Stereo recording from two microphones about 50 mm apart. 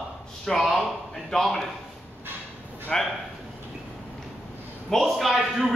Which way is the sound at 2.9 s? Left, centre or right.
Centre.